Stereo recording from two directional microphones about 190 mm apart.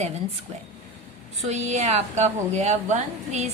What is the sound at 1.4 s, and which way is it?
A woman's voice, 35° right (ahead or behind).